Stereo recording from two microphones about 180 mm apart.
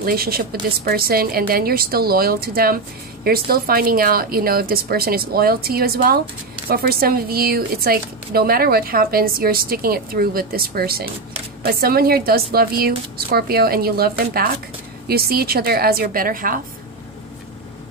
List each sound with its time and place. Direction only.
0.0 s speech: 55° right (ahead or behind)